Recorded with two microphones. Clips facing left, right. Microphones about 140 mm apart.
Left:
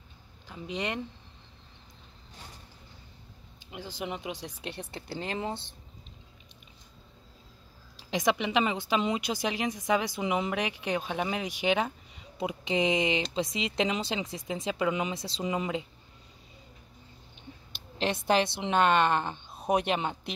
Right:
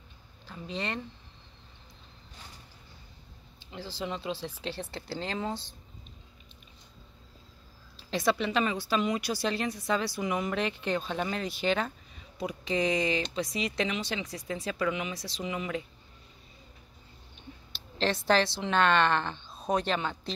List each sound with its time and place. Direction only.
0.5 s speech: 15° left (ahead or behind)
3.5 s a woman's voice: 15° left (ahead or behind)
8.0 s a woman's voice: 15° left (ahead or behind)
17.9 s a woman's voice: 15° left (ahead or behind)